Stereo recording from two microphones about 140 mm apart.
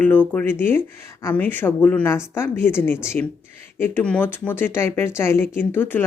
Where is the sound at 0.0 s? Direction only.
10° left (ahead or behind).